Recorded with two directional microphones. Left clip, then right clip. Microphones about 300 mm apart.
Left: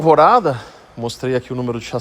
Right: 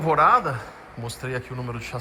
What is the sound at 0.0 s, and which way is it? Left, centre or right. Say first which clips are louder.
A man's voice: left 7 dB; centre.